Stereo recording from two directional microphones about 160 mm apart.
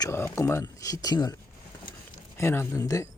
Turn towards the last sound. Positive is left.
turn(degrees=20)  # may be behind; listen again after turning